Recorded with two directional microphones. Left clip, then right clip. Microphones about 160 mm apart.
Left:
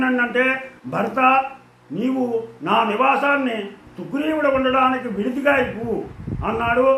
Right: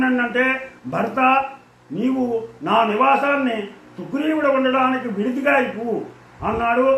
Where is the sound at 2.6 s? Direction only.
15° left (ahead or behind).